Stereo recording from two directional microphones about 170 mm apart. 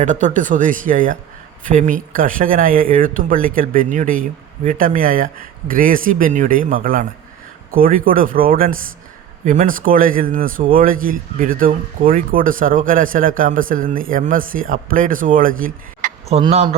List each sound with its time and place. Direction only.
0.0 s a man's voice: 45° right (ahead or behind)
16.3 s speech: 35° right (ahead or behind)